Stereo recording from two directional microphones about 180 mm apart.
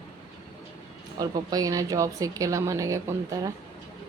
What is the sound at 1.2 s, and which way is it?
A woman's voice, 20° right (ahead or behind).